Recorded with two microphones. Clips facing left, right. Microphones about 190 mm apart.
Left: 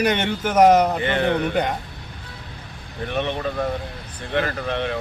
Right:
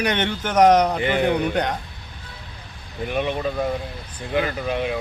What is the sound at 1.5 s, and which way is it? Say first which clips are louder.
Speech: left 1 dB; 5° left (ahead or behind).